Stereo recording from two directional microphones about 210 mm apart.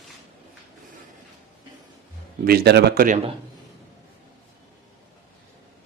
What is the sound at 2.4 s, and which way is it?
Speech, 50° right (ahead or behind).